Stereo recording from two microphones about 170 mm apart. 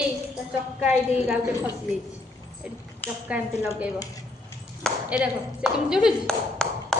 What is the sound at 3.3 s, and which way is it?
Speech, 10° right (ahead or behind).